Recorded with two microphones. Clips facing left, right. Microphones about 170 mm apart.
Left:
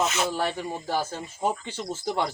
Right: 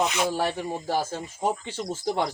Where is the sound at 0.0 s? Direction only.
15° right (ahead or behind).